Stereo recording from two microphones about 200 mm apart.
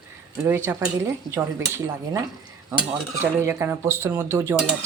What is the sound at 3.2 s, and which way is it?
Dishes, 15° right (ahead or behind).